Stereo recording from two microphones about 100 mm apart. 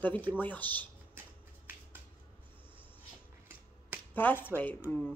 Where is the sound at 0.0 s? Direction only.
20° left (ahead or behind).